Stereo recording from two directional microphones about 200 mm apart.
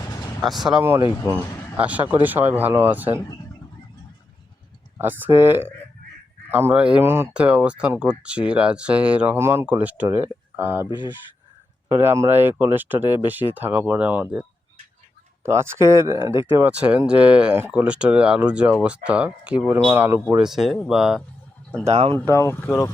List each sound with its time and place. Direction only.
0.1 s vehicle: 20° left (ahead or behind)
0.4 s speech: centre (ahead or behind)
4.9 s speech: 10° right (ahead or behind)
11.9 s speech: 10° right (ahead or behind)
15.4 s speech: 10° right (ahead or behind)
21.8 s speech: 30° right (ahead or behind)
22.4 s speech: 10° left (ahead or behind)